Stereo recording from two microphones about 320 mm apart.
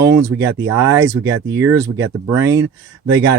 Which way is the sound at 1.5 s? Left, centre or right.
Centre.